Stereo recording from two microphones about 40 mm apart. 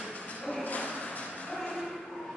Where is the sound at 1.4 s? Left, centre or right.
Left.